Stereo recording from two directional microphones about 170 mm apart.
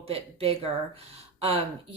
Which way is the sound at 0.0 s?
35° right (ahead or behind).